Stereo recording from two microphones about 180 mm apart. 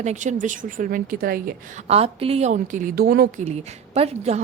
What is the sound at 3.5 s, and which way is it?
Speech, 35° right (ahead or behind).